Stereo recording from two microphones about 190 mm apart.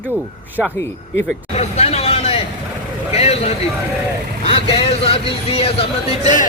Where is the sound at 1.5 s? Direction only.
35° left (ahead or behind).